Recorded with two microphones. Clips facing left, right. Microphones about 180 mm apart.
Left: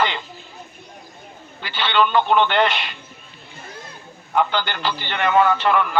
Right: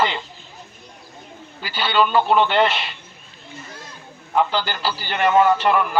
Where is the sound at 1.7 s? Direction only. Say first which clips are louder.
Even; 10° right (ahead or behind).